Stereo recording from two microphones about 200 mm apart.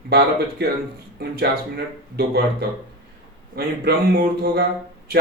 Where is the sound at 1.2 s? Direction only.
50° right (ahead or behind).